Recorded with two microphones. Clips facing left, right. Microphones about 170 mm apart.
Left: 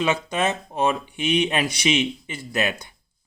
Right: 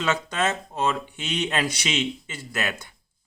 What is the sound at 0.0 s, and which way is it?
Speech, 10° left (ahead or behind).